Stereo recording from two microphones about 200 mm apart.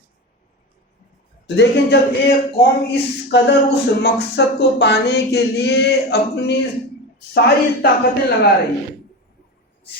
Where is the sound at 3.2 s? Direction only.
60° left (ahead or behind).